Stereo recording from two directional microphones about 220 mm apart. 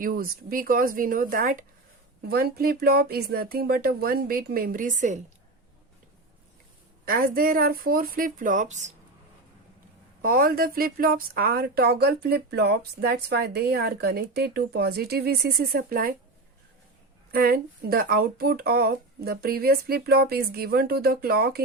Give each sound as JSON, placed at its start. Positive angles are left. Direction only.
{"t": 0.0, "sound": "a woman's voice", "side_deg": -40}
{"t": 7.1, "sound": "speech", "side_deg": -40}
{"t": 10.2, "sound": "a woman's voice", "side_deg": -40}
{"t": 17.3, "sound": "a woman's voice", "side_deg": -45}